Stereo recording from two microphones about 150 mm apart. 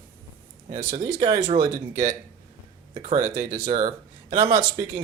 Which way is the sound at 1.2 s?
30° right (ahead or behind).